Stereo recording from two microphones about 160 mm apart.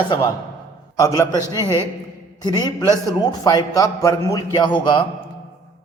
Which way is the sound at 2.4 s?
25° left (ahead or behind).